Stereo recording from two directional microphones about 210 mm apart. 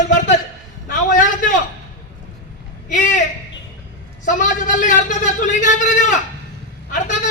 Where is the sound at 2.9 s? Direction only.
35° left (ahead or behind).